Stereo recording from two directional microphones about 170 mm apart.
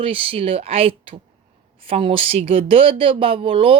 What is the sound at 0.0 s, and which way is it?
Speech, 30° right (ahead or behind).